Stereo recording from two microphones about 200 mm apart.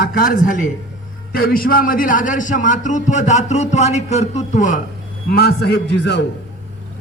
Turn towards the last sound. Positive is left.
turn(degrees=55)  # may be behind; listen again after turning